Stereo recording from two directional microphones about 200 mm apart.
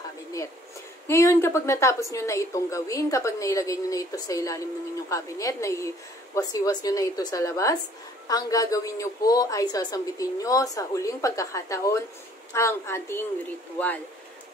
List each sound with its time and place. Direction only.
1.0 s a woman's voice: 15° left (ahead or behind)